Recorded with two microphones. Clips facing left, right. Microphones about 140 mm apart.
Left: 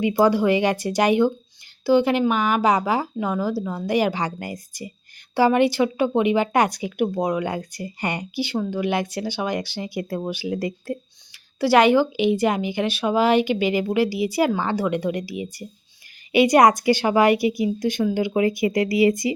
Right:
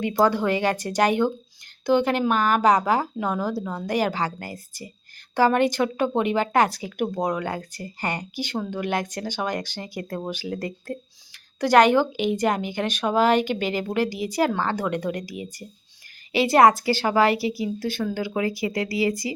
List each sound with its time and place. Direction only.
0.0 s speech: 10° left (ahead or behind)
16.5 s speech: 15° left (ahead or behind)